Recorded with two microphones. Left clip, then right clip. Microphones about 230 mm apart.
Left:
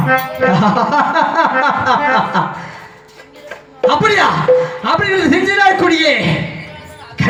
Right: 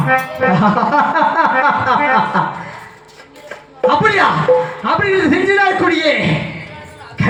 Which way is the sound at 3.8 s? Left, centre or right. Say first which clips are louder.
Left 1 dB; left.